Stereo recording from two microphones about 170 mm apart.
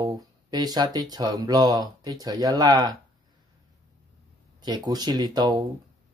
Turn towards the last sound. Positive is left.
turn(degrees=-25)  # may be behind; listen again after turning